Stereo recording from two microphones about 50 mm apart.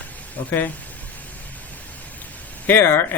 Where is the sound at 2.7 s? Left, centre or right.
Left.